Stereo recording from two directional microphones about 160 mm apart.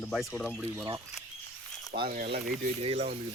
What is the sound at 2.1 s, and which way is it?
Speech, 75° right (ahead or behind).